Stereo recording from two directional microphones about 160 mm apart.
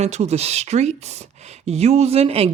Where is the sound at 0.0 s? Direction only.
45° right (ahead or behind).